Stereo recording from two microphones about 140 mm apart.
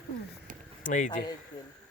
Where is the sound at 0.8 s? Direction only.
65° left (ahead or behind).